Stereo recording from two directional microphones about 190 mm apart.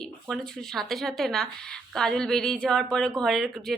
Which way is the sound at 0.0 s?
Centre (ahead or behind).